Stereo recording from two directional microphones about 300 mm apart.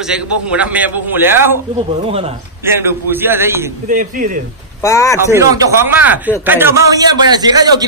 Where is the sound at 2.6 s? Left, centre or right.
Centre.